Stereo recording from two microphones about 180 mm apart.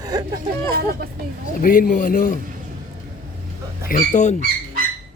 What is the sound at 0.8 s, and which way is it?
Speech, 60° right (ahead or behind).